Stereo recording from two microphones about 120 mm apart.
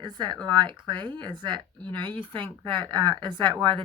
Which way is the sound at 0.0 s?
35° right (ahead or behind).